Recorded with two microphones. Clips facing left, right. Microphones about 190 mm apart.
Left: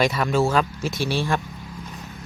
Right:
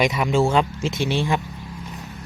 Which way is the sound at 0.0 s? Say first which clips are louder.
Right 1 dB; 15° right (ahead or behind).